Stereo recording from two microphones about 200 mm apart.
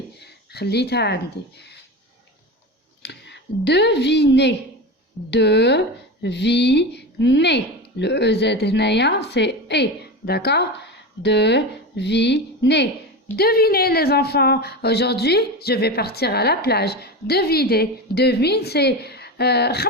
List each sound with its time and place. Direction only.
0.2 s speech: 55° left (ahead or behind)
3.0 s a woman's voice: 60° left (ahead or behind)